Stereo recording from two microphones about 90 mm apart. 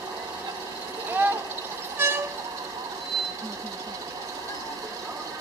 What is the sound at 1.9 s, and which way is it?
Vehicle, 25° right (ahead or behind).